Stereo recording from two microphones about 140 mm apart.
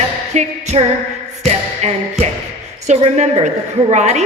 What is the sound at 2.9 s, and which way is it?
A woman's voice, 50° right (ahead or behind).